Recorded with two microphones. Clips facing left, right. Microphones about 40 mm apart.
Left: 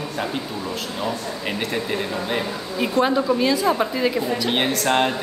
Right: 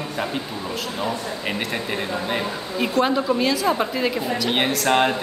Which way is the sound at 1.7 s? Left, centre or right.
Centre.